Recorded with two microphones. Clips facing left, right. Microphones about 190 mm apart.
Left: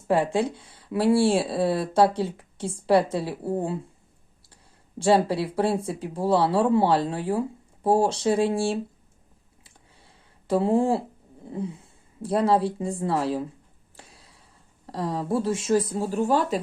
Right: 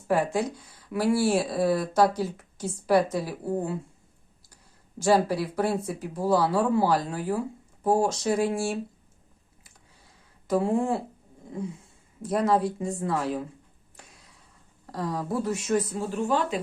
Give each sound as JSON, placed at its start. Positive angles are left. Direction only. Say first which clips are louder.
{"t": 0.1, "sound": "speech", "louder": "left 2 dB", "side_deg": 30}
{"t": 4.9, "sound": "speech", "louder": "left 2 dB", "side_deg": 30}
{"t": 9.6, "sound": "a sound", "louder": "left 3 dB", "side_deg": 30}
{"t": 11.4, "sound": "speech", "louder": "left 2 dB", "side_deg": 30}
{"t": 13.9, "sound": "a sound", "louder": "left 2 dB", "side_deg": 30}
{"t": 14.8, "sound": "speech", "louder": "left 3 dB", "side_deg": 30}